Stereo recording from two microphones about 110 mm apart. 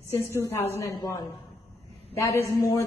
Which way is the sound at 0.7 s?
30° left (ahead or behind).